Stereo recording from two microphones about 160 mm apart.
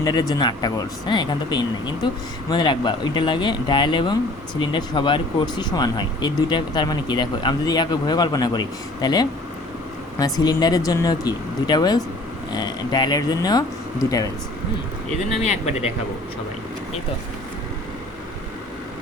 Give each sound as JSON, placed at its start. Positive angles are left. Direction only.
{"t": 0.0, "sound": "speech", "side_deg": 25}
{"t": 15.4, "sound": "speech", "side_deg": 40}